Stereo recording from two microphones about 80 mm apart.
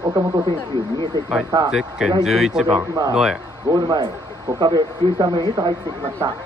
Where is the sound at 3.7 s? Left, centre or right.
Right.